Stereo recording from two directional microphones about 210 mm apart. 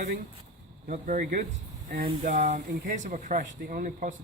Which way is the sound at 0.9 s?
40° right (ahead or behind).